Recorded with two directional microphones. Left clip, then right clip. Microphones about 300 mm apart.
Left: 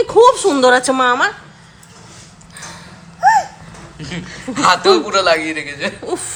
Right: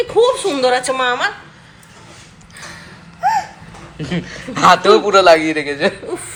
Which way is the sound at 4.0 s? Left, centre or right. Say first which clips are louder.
Right 4 dB; centre.